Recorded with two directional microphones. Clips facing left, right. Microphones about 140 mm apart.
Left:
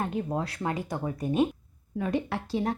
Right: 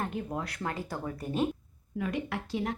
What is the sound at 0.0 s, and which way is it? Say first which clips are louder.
A woman's voice: left 4 dB; 25° left (ahead or behind).